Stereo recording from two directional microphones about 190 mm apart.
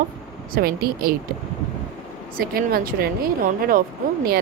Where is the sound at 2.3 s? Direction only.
50° right (ahead or behind).